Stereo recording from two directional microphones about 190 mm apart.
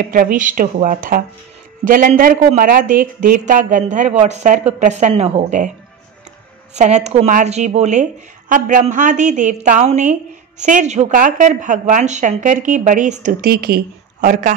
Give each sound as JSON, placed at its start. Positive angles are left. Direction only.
{"t": 0.0, "sound": "speech", "side_deg": -45}
{"t": 6.7, "sound": "a woman's voice", "side_deg": -35}